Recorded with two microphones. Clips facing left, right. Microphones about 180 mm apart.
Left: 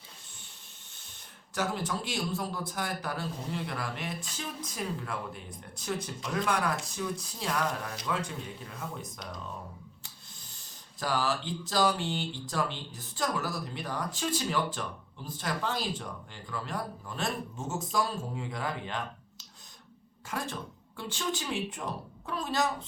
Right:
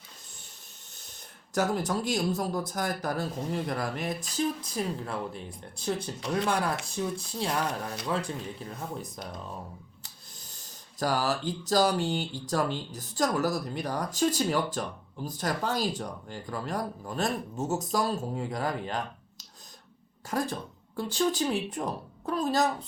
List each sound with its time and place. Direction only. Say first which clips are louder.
1.5 s speech: right 5 dB; 40° right (ahead or behind)
11.0 s speech: right 3 dB; 45° right (ahead or behind)